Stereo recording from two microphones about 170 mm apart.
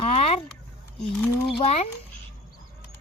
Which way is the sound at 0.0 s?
35° left (ahead or behind).